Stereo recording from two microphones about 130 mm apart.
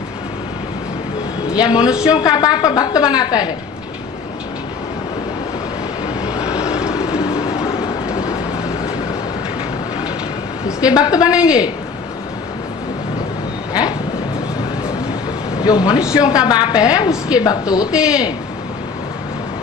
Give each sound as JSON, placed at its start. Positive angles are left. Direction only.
{"t": 1.5, "sound": "a man's voice", "side_deg": 30}
{"t": 1.9, "sound": "speech", "side_deg": -5}
{"t": 2.1, "sound": "a woman's voice", "side_deg": 30}
{"t": 6.5, "sound": "vehicle", "side_deg": -10}
{"t": 10.9, "sound": "a woman's voice", "side_deg": 30}
{"t": 11.3, "sound": "speech", "side_deg": -5}
{"t": 15.6, "sound": "a man's voice", "side_deg": 30}
{"t": 16.0, "sound": "speech", "side_deg": -5}
{"t": 16.2, "sound": "a woman's voice", "side_deg": 30}
{"t": 17.9, "sound": "speech", "side_deg": -5}